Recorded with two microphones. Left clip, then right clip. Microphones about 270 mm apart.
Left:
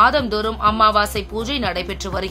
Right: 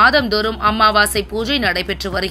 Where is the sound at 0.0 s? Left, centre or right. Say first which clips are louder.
Right 3 dB; centre.